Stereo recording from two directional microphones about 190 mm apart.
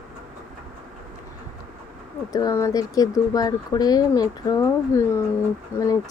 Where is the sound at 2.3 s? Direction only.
20° left (ahead or behind).